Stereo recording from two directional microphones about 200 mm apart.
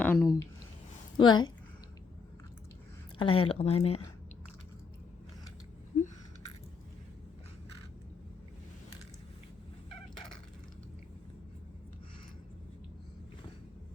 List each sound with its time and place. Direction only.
0.0 s a sound: 10° left (ahead or behind)
1.1 s a woman's voice: 20° left (ahead or behind)
3.2 s speech: 25° left (ahead or behind)